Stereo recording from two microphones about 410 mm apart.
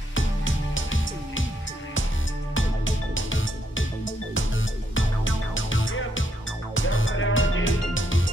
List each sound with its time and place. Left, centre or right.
0.7 s music: left
2.5 s music: left
4.9 s music: left